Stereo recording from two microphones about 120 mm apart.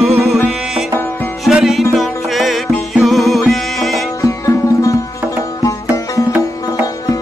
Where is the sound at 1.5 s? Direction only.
5° right (ahead or behind).